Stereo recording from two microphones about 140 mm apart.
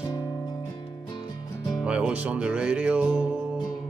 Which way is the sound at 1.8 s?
10° right (ahead or behind).